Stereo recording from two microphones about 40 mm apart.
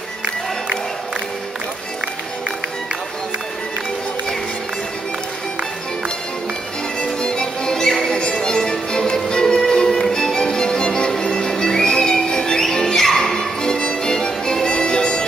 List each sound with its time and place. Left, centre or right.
7.2 s music: centre